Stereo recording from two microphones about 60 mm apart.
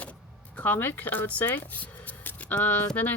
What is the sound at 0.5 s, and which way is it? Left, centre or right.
Speech, left.